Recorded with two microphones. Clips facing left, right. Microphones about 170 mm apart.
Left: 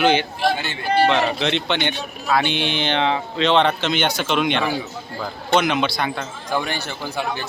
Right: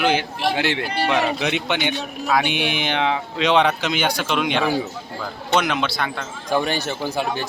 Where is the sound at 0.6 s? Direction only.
90° right.